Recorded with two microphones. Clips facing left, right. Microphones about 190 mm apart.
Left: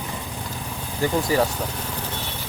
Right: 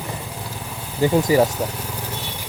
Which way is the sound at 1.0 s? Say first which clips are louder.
Right 5 dB; 15° right (ahead or behind).